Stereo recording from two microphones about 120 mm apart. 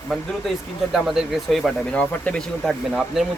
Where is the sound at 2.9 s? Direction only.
5° right (ahead or behind).